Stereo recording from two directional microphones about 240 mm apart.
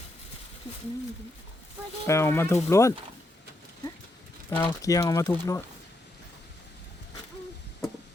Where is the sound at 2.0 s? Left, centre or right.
Centre.